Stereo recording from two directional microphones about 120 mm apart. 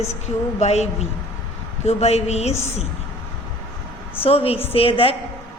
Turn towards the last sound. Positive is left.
turn(degrees=50)  # may be behind; listen again after turning